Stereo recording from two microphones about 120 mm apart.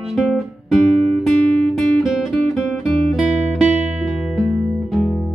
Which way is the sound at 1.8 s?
Centre (ahead or behind).